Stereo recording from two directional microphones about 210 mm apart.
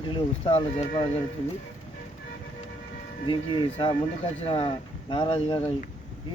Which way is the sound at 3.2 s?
25° left (ahead or behind).